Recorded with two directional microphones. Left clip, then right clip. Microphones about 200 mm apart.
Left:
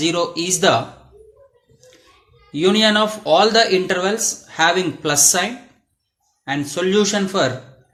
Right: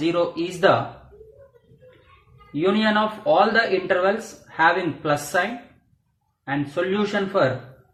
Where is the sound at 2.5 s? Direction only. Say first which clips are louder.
Left 5 dB; 55° left (ahead or behind).